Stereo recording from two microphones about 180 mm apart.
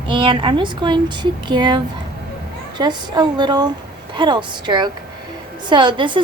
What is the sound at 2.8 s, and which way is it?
A woman's voice, 25° right (ahead or behind).